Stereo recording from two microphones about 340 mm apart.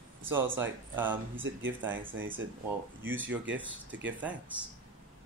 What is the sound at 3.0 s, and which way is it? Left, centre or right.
Speech, centre.